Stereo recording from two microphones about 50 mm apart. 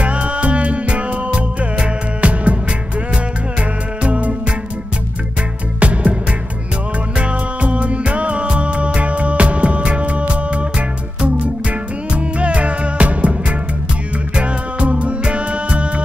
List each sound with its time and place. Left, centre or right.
0.0 s music: right
4.0 s music: right
5.8 s music: right
7.2 s music: right